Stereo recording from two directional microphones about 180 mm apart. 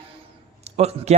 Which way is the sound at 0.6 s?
35° right (ahead or behind).